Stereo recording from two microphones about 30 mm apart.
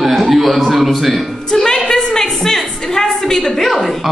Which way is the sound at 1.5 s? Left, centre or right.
Left.